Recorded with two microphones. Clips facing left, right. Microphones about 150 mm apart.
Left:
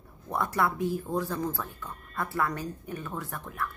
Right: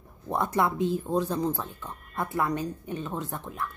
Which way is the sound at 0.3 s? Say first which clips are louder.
Right 2 dB; 20° right (ahead or behind).